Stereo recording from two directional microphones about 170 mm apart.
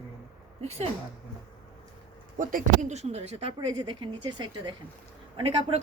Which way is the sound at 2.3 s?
50° right (ahead or behind).